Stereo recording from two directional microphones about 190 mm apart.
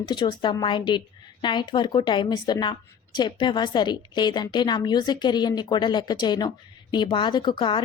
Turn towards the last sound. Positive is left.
turn(degrees=25)  # may be behind; listen again after turning